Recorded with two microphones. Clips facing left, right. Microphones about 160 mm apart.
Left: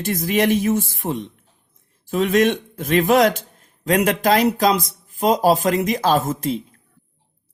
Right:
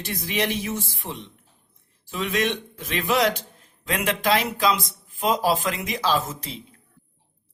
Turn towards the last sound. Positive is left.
turn(degrees=45)  # may be behind; listen again after turning